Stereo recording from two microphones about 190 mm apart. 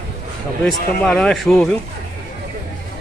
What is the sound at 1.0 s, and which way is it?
Speech, 5° left (ahead or behind).